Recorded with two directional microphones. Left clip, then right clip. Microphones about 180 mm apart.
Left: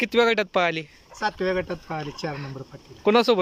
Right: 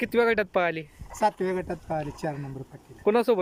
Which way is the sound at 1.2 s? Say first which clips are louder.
Left 1 dB; 20° right (ahead or behind).